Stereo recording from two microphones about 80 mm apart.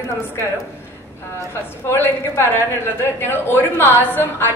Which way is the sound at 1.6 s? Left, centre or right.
Left.